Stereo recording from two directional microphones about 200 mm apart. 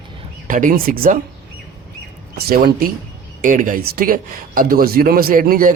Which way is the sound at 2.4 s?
50° right (ahead or behind).